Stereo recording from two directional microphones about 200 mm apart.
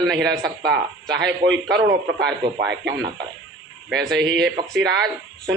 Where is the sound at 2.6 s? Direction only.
60° right (ahead or behind).